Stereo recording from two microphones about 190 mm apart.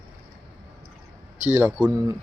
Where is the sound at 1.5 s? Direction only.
5° right (ahead or behind).